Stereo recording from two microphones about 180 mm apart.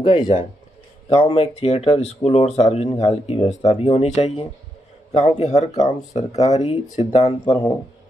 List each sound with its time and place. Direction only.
0.0 s speech: 30° left (ahead or behind)